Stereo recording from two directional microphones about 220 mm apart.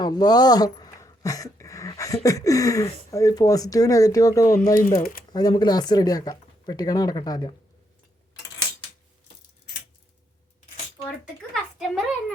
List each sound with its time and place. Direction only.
0.0 s speech: 20° left (ahead or behind)
4.7 s speech: 40° left (ahead or behind)
5.3 s speech: 20° left (ahead or behind)
11.5 s a sound: centre (ahead or behind)